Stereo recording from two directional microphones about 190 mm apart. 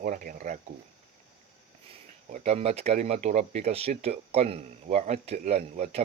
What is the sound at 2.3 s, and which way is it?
Speech, 35° right (ahead or behind).